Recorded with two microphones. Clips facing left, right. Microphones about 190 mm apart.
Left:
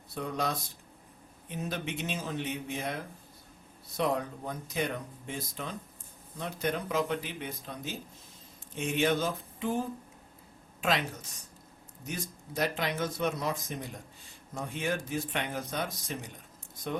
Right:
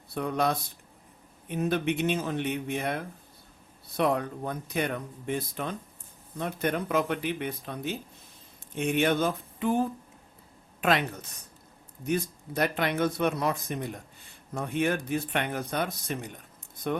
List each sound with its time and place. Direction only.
0.1 s a woman's voice: 60° right (ahead or behind)